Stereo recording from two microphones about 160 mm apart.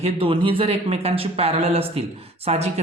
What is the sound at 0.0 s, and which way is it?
A man's voice, 35° right (ahead or behind).